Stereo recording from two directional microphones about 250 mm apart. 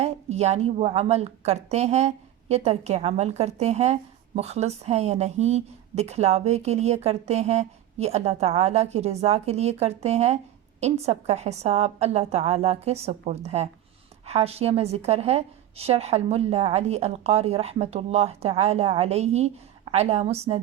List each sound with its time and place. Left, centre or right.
0.0 s speech: right